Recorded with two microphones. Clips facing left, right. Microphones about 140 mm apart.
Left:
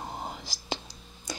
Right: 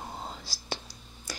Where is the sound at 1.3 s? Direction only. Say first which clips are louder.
Left 3 dB; 20° left (ahead or behind).